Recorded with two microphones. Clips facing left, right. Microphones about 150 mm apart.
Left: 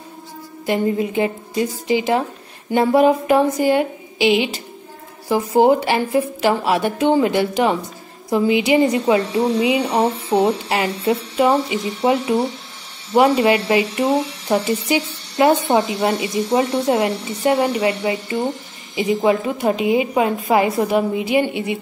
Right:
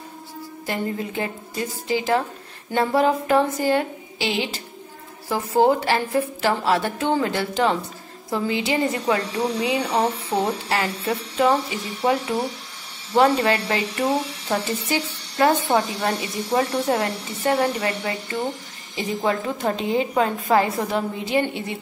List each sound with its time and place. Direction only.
0.7 s a woman's voice: 15° left (ahead or behind)